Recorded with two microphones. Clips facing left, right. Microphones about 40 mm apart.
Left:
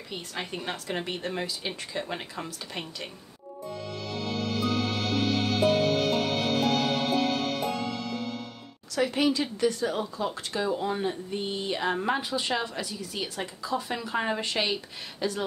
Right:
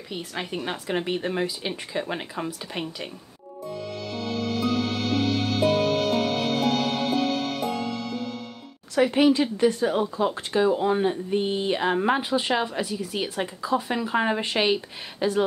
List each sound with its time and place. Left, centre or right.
0.1 s speech: centre
4.0 s music: centre
8.9 s speech: right